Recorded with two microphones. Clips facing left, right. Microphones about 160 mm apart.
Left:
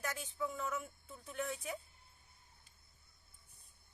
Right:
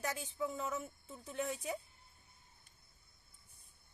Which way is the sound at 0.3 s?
25° right (ahead or behind).